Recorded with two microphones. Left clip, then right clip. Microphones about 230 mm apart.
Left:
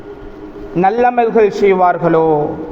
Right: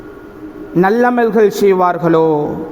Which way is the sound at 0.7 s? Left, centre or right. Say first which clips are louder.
Even; right.